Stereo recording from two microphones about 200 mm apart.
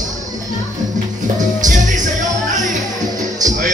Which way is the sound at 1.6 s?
40° right (ahead or behind).